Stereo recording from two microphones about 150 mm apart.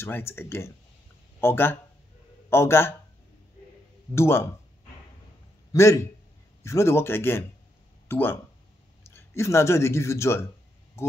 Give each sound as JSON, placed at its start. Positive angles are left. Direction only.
{"t": 0.0, "sound": "speech", "side_deg": 15}
{"t": 4.1, "sound": "speech", "side_deg": 15}
{"t": 5.7, "sound": "a man's voice", "side_deg": 20}